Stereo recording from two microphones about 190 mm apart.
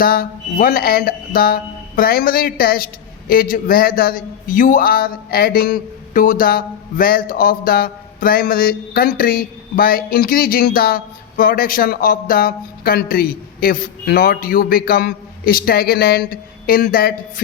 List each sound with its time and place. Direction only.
0.0 s music: 50° left (ahead or behind)